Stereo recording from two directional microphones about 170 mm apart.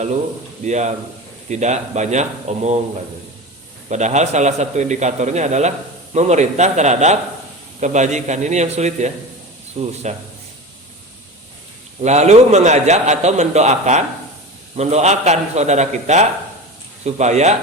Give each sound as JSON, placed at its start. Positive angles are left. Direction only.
{"t": 0.6, "sound": "a man's voice", "side_deg": -45}
{"t": 3.8, "sound": "a man's voice", "side_deg": -45}
{"t": 12.0, "sound": "a man's voice", "side_deg": -40}